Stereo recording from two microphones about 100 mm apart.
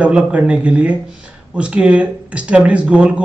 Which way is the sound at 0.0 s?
10° right (ahead or behind).